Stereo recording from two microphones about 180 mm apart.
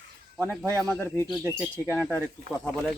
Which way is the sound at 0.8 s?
10° left (ahead or behind).